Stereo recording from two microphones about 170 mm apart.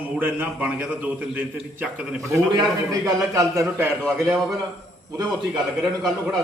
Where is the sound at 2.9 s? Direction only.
20° right (ahead or behind).